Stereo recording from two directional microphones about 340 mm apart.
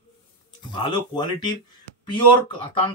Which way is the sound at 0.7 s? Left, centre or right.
Centre.